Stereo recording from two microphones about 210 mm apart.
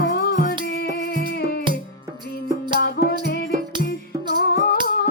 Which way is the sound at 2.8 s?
50° left (ahead or behind).